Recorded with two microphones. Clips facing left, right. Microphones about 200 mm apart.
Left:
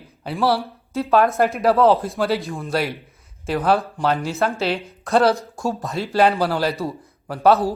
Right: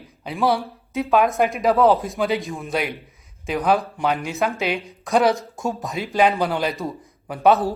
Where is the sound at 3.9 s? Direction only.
15° right (ahead or behind).